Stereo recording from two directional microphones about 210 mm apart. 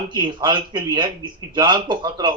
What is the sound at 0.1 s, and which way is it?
Speech, 20° right (ahead or behind).